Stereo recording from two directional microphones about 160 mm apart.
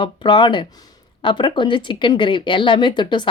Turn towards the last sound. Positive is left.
turn(degrees=30)  # may be behind; listen again after turning